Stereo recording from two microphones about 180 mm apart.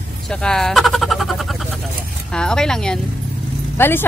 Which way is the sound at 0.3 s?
5° left (ahead or behind).